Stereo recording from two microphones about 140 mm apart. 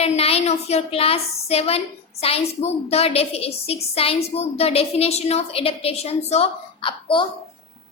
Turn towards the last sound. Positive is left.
turn(degrees=35)  # may be behind; listen again after turning